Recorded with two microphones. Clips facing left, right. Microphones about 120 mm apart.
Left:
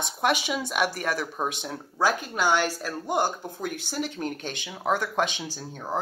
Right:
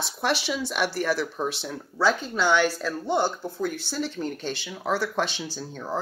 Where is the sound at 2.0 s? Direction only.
10° left (ahead or behind).